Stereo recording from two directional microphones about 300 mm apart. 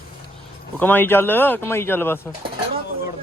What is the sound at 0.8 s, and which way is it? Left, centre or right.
Speech, centre.